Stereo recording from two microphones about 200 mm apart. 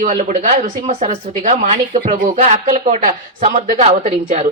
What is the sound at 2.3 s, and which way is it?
A woman's voice, 30° right (ahead or behind).